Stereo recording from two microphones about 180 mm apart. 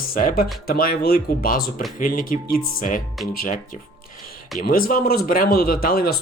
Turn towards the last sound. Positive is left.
turn(degrees=55)  # may be behind; listen again after turning